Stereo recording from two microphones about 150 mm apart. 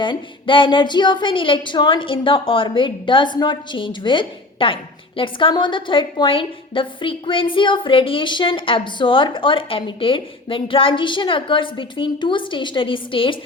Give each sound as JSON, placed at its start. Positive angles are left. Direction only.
{"t": 0.0, "sound": "speech", "side_deg": 35}